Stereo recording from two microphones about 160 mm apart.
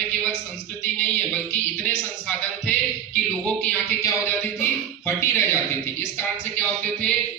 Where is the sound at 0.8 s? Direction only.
10° left (ahead or behind).